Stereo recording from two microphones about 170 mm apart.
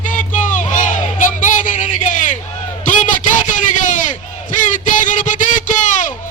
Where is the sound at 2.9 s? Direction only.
50° left (ahead or behind).